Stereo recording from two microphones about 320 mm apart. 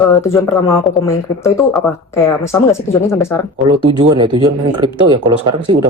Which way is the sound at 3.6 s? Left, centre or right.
Centre.